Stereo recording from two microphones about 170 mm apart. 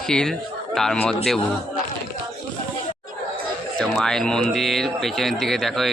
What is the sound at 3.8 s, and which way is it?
Speech, 5° left (ahead or behind).